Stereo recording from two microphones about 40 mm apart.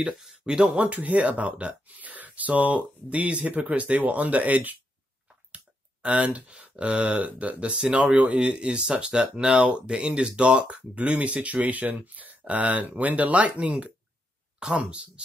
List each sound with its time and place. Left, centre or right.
0.0 s a sound: centre
0.5 s speech: right
0.8 s speech: right
6.0 s speech: right